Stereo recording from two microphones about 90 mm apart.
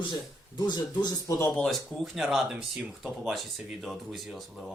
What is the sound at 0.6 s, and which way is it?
Speech, 55° left (ahead or behind).